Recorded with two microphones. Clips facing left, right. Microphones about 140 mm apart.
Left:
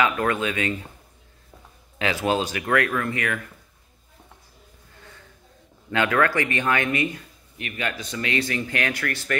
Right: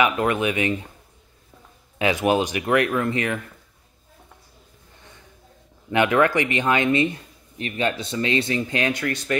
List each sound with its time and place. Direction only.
0.0 s speech: 20° right (ahead or behind)
2.0 s speech: 20° right (ahead or behind)
5.9 s speech: 20° right (ahead or behind)